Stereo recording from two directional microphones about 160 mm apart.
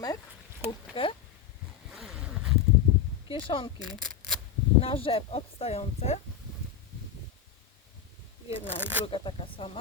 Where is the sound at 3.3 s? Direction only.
30° left (ahead or behind).